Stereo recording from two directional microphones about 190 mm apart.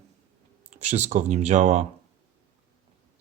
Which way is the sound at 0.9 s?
35° right (ahead or behind).